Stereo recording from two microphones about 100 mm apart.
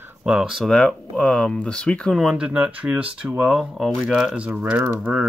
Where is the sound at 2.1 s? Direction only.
5° right (ahead or behind).